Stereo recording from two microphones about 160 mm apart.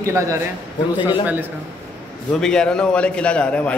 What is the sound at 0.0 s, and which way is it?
Speech, 15° right (ahead or behind).